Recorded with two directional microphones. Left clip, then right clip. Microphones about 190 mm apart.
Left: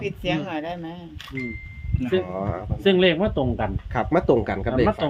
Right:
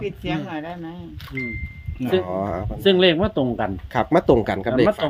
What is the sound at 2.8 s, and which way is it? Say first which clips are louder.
Speech: right 2 dB; 50° right (ahead or behind).